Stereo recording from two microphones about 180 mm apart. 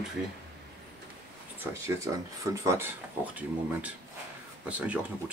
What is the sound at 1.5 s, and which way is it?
Speech, 15° right (ahead or behind).